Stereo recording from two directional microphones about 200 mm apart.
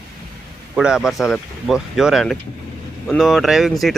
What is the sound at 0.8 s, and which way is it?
Speech, 5° right (ahead or behind).